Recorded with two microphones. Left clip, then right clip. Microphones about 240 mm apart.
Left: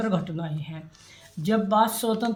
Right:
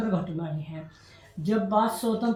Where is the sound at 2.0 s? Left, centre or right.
Left.